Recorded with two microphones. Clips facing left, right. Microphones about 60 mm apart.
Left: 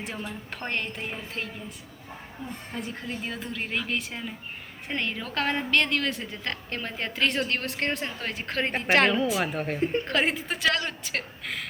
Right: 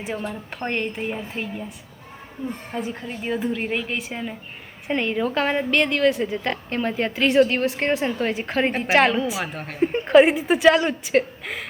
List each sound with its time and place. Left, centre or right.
0.0 s a woman's voice: centre
2.8 s a woman's voice: centre
9.8 s a woman's voice: centre